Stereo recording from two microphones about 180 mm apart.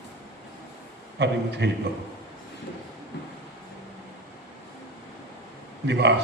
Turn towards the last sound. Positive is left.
turn(degrees=-70)  # may be behind; listen again after turning